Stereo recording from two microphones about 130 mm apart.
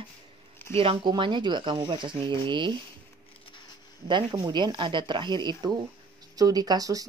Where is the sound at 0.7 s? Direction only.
40° right (ahead or behind).